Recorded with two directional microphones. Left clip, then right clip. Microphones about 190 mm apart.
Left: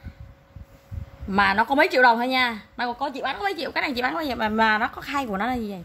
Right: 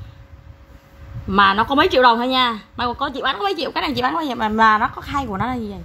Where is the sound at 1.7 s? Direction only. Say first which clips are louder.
Right 3 dB; 45° left (ahead or behind).